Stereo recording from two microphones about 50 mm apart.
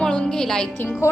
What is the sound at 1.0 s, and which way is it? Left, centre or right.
Speech, left.